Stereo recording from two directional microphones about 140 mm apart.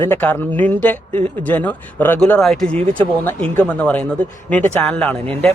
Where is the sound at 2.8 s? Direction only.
40° right (ahead or behind).